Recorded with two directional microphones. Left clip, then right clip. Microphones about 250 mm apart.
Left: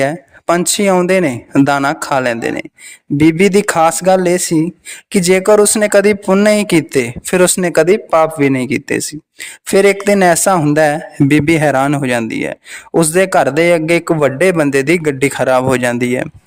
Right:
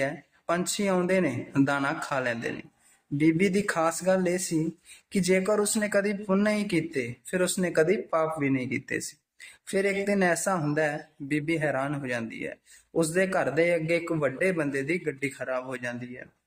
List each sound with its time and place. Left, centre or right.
0.0 s speech: left